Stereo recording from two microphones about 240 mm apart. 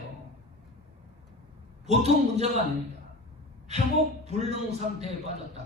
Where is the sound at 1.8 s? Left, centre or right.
Right.